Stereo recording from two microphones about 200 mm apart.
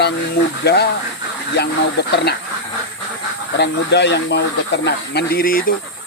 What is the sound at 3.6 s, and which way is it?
Speech, 60° left (ahead or behind).